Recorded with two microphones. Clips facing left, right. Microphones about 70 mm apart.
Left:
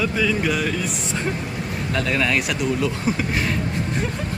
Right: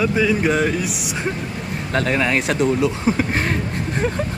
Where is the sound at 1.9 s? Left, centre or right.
Right.